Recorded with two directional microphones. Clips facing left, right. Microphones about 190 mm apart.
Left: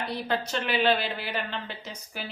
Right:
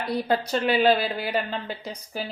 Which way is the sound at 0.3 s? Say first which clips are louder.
Right 6 dB; 40° right (ahead or behind).